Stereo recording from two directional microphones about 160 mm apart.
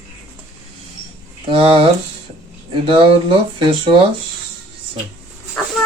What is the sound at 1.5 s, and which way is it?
Speech, 35° right (ahead or behind).